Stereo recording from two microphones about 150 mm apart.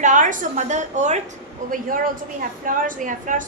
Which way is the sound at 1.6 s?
70° right (ahead or behind).